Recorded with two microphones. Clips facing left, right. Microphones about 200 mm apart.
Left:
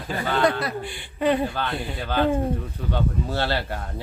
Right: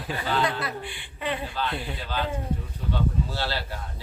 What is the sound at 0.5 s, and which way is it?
A man's voice, 40° left (ahead or behind).